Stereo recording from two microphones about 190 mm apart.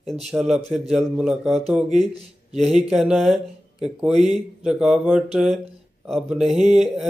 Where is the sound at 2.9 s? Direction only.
Centre (ahead or behind).